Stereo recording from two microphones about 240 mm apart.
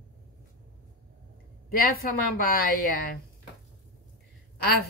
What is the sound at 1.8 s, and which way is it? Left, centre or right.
Speech, left.